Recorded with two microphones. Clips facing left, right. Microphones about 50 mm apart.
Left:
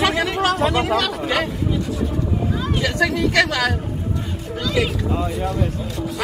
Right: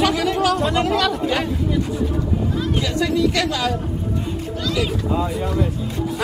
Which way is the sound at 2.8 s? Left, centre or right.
Left.